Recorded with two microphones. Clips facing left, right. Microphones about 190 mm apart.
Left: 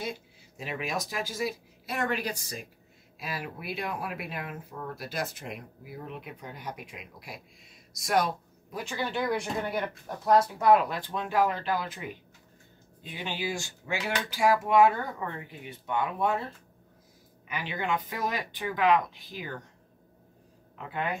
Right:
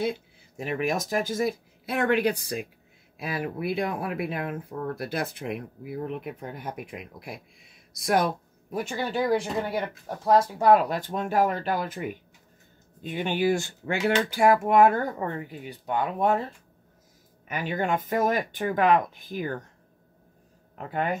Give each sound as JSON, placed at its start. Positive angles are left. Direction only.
{"t": 0.0, "sound": "speech", "side_deg": -55}
{"t": 9.2, "sound": "speech", "side_deg": -35}
{"t": 17.5, "sound": "speech", "side_deg": -45}
{"t": 20.7, "sound": "speech", "side_deg": -45}